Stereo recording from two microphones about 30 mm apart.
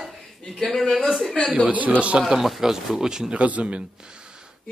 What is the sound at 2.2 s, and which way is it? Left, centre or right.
Speech, centre.